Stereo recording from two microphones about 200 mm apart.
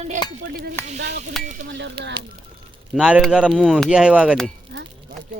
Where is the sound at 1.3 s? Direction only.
Centre (ahead or behind).